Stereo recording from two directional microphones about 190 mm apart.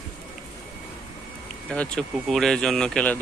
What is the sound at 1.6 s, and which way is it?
Speech, 5° left (ahead or behind).